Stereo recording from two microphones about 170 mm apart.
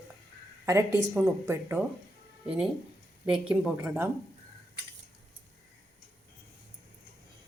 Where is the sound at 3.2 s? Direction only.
5° right (ahead or behind).